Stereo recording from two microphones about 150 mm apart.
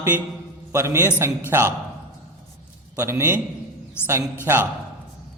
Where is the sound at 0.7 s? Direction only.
20° right (ahead or behind).